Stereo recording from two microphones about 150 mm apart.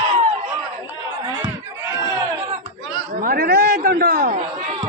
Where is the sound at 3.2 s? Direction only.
75° right (ahead or behind).